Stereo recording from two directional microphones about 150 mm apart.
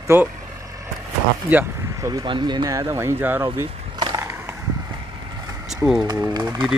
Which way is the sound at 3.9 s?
20° right (ahead or behind).